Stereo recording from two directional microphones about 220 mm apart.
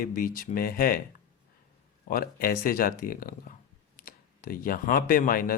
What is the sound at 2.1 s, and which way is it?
Speech, 40° left (ahead or behind).